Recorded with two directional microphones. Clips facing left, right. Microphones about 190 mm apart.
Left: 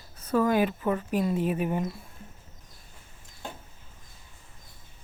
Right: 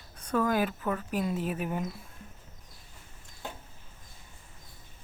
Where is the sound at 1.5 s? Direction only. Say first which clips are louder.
Left 4 dB; centre (ahead or behind).